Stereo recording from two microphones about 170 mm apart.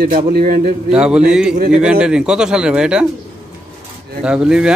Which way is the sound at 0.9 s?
5° right (ahead or behind).